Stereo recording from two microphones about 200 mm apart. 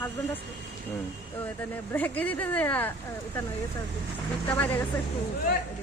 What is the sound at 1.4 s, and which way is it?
Speech, 10° left (ahead or behind).